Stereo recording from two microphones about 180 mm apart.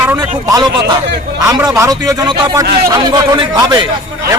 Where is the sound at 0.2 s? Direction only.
20° right (ahead or behind).